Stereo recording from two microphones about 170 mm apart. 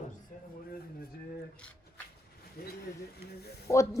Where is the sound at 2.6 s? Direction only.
65° left (ahead or behind).